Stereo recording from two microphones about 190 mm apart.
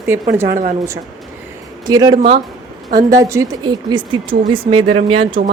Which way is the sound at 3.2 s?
15° right (ahead or behind).